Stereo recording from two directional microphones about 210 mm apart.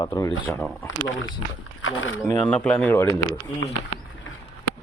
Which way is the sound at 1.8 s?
75° left (ahead or behind).